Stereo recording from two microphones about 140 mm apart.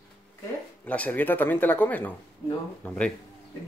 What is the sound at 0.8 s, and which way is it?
Speech, 10° left (ahead or behind).